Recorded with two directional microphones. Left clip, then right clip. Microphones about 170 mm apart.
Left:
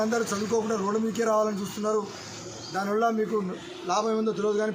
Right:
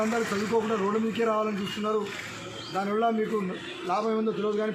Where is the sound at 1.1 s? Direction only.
25° left (ahead or behind).